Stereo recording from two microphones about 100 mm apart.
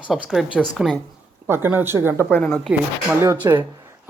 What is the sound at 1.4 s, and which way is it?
Speech, 20° right (ahead or behind).